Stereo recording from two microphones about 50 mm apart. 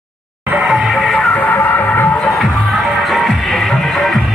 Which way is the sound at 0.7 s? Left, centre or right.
Centre.